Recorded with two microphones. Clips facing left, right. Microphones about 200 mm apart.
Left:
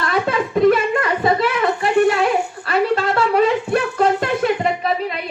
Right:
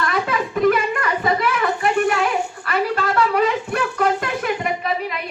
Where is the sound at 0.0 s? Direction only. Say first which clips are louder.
Left 2 dB; 30° left (ahead or behind).